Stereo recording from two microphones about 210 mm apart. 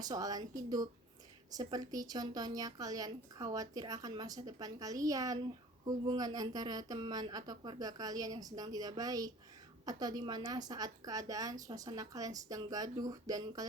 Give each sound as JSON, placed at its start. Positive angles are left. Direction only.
{"t": 0.0, "sound": "speech", "side_deg": -20}